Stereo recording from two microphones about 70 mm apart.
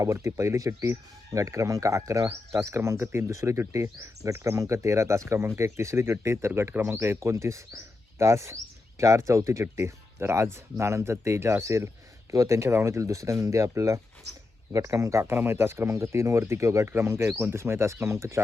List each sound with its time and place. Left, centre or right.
0.0 s speech: right
15.3 s speech: right